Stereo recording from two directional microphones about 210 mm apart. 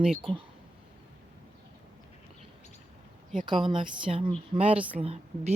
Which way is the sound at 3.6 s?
20° right (ahead or behind).